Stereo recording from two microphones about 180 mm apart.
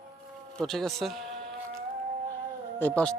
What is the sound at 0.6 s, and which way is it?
Speech, centre (ahead or behind).